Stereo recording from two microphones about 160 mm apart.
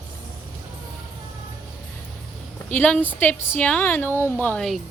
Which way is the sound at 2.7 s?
10° left (ahead or behind).